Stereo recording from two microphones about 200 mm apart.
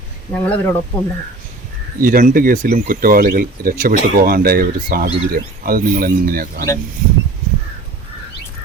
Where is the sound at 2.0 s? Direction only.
45° right (ahead or behind).